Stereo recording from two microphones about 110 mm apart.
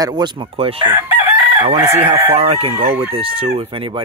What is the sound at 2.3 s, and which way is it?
Speech, 60° right (ahead or behind).